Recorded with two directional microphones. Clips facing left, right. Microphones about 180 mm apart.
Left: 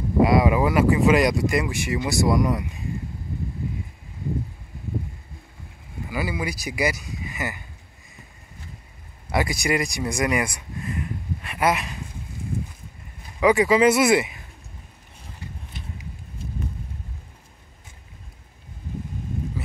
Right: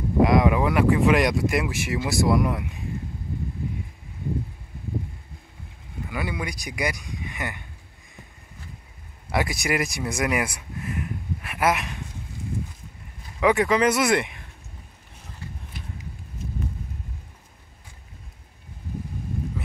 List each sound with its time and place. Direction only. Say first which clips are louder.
0.2 s speech: left 1 dB; 5° left (ahead or behind)
6.0 s speech: left 3 dB; 5° left (ahead or behind)
9.3 s speech: left 2 dB; centre (ahead or behind)
13.4 s speech: left 3 dB; centre (ahead or behind)
15.7 s a sound: left 1 dB; 25° left (ahead or behind)